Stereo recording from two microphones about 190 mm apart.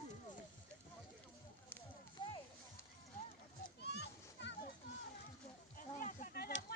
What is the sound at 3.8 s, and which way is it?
Children playing, 60° left (ahead or behind).